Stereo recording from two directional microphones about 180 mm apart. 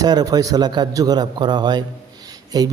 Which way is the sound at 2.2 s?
20° right (ahead or behind).